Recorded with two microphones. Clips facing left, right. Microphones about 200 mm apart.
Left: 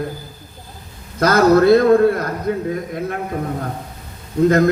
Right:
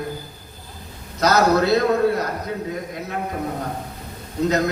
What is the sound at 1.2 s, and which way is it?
A man's voice, 55° left (ahead or behind).